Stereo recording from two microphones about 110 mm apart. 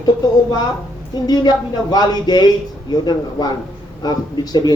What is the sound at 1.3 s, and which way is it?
A woman's voice, 35° left (ahead or behind).